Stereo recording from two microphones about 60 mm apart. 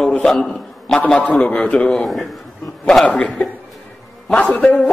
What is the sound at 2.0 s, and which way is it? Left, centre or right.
A man's voice, centre.